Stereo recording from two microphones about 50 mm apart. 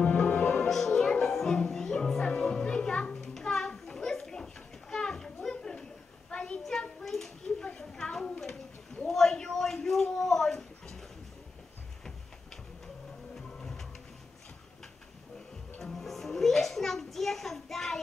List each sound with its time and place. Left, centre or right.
0.0 s music: left
0.7 s music: centre
3.3 s children playing: centre
6.3 s a sound: centre
6.6 s a sound: centre
12.8 s printer: centre
15.8 s music: centre